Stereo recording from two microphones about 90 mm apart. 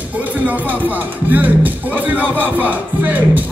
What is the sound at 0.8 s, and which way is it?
Music, 20° right (ahead or behind).